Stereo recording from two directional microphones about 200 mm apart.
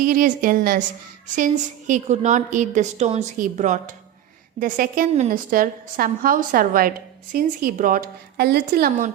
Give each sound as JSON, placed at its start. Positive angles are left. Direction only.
{"t": 0.0, "sound": "a woman's voice", "side_deg": -45}
{"t": 1.9, "sound": "a woman's voice", "side_deg": -35}